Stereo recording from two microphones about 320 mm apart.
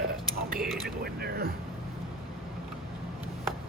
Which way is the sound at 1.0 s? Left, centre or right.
Right.